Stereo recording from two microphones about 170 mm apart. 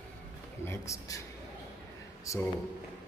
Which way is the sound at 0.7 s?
20° left (ahead or behind).